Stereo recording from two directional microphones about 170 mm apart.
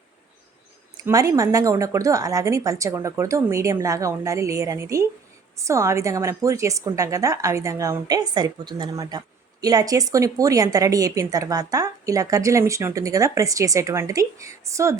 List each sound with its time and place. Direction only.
1.0 s a woman's voice: 20° right (ahead or behind)